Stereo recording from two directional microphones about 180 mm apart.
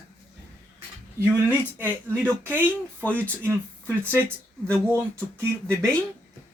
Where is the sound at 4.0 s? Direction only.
10° right (ahead or behind).